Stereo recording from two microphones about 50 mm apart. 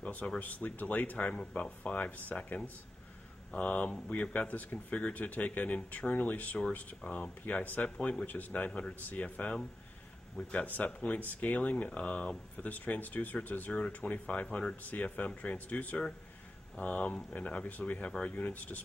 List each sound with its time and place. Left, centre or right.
0.0 s speech: left
1.1 s speech: left
10.5 s speech: left